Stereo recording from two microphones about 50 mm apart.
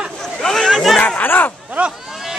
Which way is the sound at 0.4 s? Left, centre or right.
Centre.